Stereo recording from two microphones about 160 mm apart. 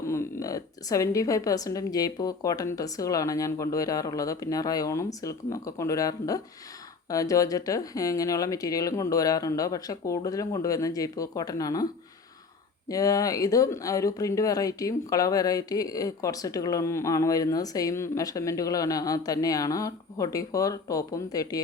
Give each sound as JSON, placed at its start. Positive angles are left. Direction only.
{"t": 0.0, "sound": "speech", "side_deg": 20}
{"t": 12.9, "sound": "speech", "side_deg": 20}